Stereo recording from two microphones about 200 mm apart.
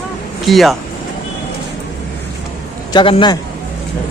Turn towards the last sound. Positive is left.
turn(degrees=25)  # may be behind; listen again after turning